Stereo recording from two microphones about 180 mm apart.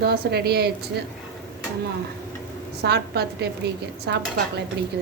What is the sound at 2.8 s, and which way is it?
A woman's voice, 65° right (ahead or behind).